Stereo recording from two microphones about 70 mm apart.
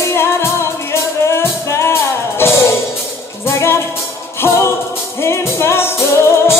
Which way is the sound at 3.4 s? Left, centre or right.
Left.